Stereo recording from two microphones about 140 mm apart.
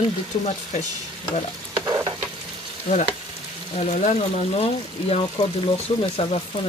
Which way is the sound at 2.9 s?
60° left (ahead or behind).